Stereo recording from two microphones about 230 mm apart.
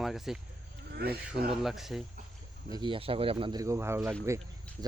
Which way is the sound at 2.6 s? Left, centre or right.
Centre.